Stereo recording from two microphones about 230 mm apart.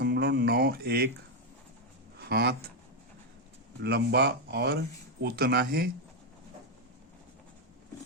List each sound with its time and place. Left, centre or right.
0.0 s a sound: right
2.3 s speech: right
3.8 s speech: right